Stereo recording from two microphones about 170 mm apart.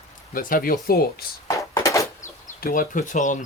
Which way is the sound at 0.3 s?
55° left (ahead or behind).